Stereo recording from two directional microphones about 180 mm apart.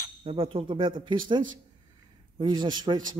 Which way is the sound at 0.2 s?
35° right (ahead or behind).